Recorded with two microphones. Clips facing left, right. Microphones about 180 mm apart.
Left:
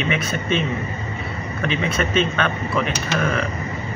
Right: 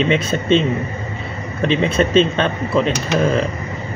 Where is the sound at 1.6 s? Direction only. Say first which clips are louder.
Right 7 dB; 30° right (ahead or behind).